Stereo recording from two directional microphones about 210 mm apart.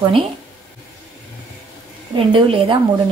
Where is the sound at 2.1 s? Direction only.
25° right (ahead or behind).